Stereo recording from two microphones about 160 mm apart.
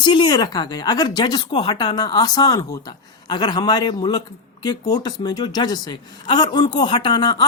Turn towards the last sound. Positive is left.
turn(degrees=25)  # may be behind; listen again after turning